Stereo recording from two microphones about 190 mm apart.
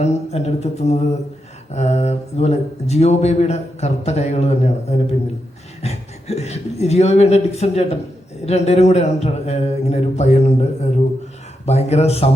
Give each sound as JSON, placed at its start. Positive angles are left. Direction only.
{"t": 0.0, "sound": "speech", "side_deg": 35}